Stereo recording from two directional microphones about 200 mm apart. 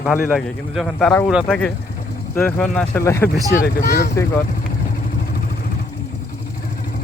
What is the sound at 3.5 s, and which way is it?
Speech, 50° left (ahead or behind).